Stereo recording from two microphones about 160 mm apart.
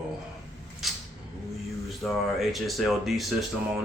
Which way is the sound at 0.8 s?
Centre (ahead or behind).